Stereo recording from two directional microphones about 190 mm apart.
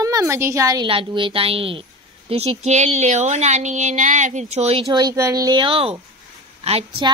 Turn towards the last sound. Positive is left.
turn(degrees=-35)  # may be behind; listen again after turning